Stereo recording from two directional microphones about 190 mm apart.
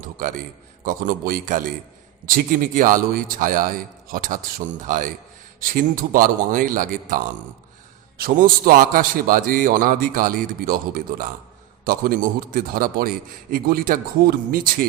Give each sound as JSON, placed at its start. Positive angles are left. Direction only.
{"t": 0.0, "sound": "a man's voice", "side_deg": -45}
{"t": 8.2, "sound": "a man's voice", "side_deg": -50}